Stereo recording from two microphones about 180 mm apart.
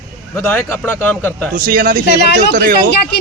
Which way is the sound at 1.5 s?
55° right (ahead or behind).